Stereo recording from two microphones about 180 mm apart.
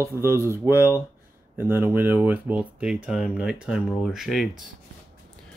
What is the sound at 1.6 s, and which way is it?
Speech, 10° right (ahead or behind).